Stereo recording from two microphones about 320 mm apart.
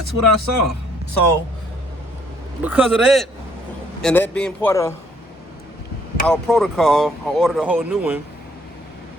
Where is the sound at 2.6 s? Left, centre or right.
Centre.